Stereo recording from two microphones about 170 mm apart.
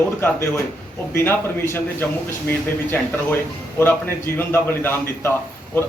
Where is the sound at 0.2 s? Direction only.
15° left (ahead or behind).